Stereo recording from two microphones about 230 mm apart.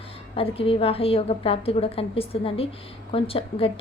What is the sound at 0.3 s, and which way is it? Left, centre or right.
A woman's voice, left.